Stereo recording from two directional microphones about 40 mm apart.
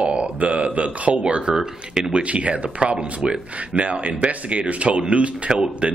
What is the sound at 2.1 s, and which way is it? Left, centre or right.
Speech, right.